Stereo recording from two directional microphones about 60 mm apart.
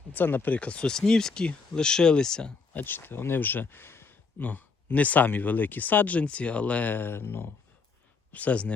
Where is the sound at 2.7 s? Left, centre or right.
Left.